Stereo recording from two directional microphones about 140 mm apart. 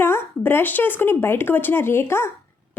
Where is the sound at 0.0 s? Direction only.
15° left (ahead or behind).